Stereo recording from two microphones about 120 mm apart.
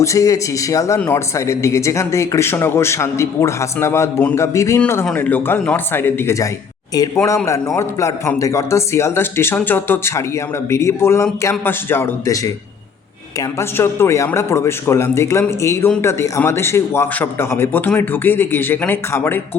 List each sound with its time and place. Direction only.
0.0 s a man's voice: 25° left (ahead or behind)
13.6 s a man's voice: 20° left (ahead or behind)